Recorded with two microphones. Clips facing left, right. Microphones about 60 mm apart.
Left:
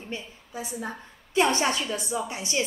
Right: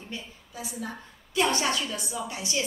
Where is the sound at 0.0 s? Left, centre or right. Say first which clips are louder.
Left 3 dB; left.